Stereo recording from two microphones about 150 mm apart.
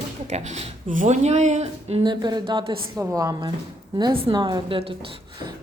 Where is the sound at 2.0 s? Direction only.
30° right (ahead or behind).